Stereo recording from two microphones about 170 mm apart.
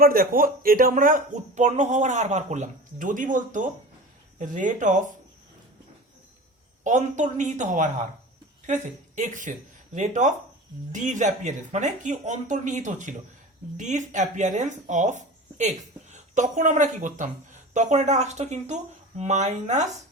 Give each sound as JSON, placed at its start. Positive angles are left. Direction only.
{"t": 0.0, "sound": "speech", "side_deg": -55}
{"t": 6.8, "sound": "speech", "side_deg": -45}